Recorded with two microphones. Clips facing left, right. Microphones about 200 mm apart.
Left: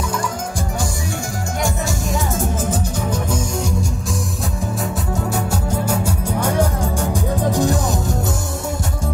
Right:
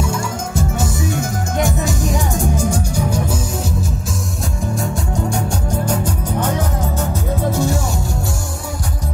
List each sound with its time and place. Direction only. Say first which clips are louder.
1.6 s music: right 4 dB; 20° right (ahead or behind)
5.9 s music: even; 10° left (ahead or behind)